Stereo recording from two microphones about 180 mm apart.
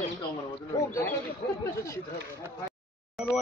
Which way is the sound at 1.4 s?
70° left (ahead or behind).